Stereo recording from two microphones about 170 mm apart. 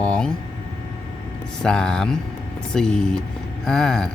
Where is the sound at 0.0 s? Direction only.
5° left (ahead or behind).